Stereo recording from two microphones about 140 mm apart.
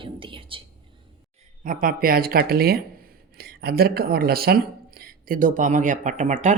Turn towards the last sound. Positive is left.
turn(degrees=-60)  # may be behind; listen again after turning